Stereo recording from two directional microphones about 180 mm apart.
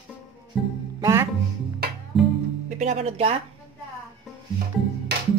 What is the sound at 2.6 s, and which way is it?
Speech, 40° right (ahead or behind).